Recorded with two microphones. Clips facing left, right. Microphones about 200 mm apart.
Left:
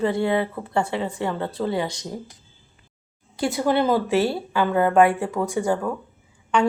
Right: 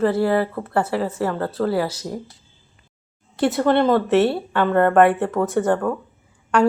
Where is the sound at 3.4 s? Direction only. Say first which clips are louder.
Right 4 dB; centre (ahead or behind).